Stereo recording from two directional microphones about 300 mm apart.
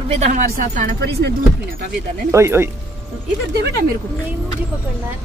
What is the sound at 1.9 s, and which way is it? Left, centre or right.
Speech, centre.